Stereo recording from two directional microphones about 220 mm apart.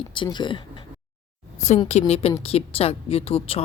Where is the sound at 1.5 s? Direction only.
30° left (ahead or behind).